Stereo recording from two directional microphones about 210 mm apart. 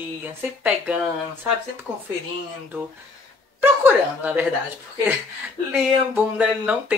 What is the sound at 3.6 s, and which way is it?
Speech, 10° right (ahead or behind).